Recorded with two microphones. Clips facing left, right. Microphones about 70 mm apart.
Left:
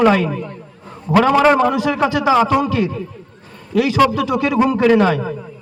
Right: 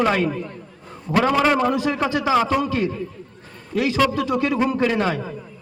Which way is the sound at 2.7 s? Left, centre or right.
Right.